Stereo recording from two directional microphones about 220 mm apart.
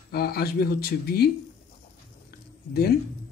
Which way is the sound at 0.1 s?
45° left (ahead or behind).